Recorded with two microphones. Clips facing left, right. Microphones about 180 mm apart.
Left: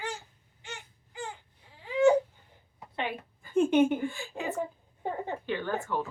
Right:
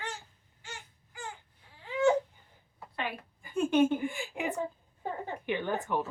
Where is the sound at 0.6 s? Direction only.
20° left (ahead or behind).